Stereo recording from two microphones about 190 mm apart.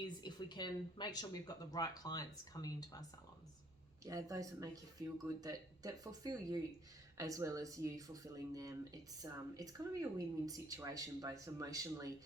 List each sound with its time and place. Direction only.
0.2 s speech: 25° left (ahead or behind)
4.0 s speech: 15° right (ahead or behind)